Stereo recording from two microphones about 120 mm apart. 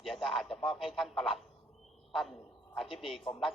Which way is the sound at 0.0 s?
Centre (ahead or behind).